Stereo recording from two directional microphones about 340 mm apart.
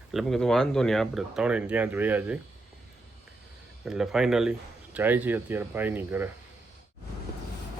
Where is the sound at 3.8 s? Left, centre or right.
Centre.